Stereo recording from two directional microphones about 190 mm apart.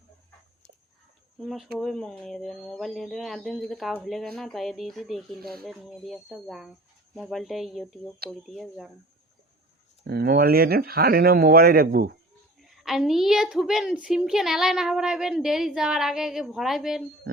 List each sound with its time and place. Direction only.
1.4 s a woman's voice: centre (ahead or behind)
10.0 s speech: 55° right (ahead or behind)
12.6 s a woman's voice: centre (ahead or behind)